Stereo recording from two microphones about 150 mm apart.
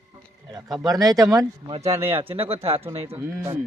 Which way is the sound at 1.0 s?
20° right (ahead or behind).